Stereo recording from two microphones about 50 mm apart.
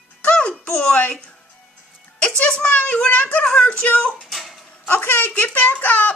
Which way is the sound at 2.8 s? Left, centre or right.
Left.